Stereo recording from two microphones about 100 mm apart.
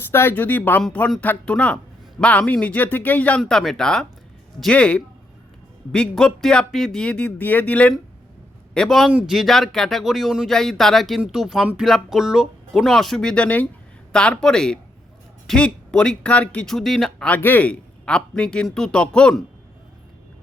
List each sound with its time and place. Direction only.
0.1 s speech: 25° left (ahead or behind)
3.5 s a man's voice: 5° left (ahead or behind)